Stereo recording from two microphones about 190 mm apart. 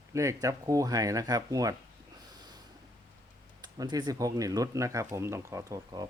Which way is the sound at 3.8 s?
20° right (ahead or behind).